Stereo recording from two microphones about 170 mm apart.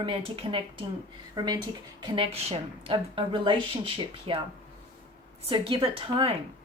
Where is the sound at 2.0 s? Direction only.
30° right (ahead or behind).